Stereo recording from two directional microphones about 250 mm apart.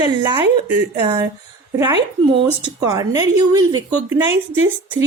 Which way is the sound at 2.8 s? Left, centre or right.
Centre.